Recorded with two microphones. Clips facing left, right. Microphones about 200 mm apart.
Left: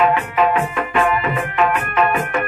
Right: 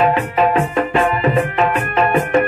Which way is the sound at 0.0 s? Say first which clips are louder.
Right 1 dB; 35° right (ahead or behind).